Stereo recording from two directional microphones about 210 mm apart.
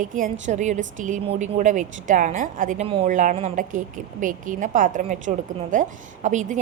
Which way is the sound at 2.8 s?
25° right (ahead or behind).